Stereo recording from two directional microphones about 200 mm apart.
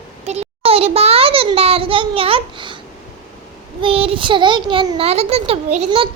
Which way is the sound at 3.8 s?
30° right (ahead or behind).